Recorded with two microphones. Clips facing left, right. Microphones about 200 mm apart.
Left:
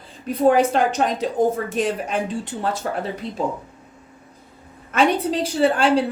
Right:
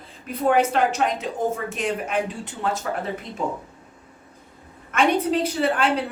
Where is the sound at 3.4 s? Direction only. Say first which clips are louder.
Left 3 dB; 35° left (ahead or behind).